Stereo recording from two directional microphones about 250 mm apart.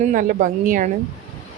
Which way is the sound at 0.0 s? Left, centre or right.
Right.